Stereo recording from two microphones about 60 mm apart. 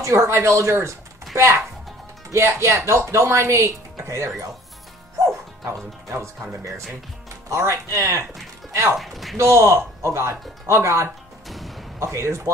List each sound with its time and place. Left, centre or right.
0.0 s speech: right
5.7 s speech: right
7.4 s speech: right
8.9 s speech: centre
9.4 s speech: right
11.4 s music: centre
12.0 s speech: right